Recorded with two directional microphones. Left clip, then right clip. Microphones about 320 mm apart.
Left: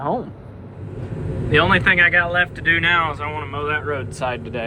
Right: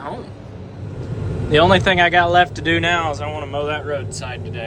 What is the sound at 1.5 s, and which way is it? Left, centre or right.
A man's voice, centre.